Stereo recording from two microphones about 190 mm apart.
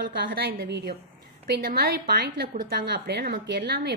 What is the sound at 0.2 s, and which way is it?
A woman's voice, 50° right (ahead or behind).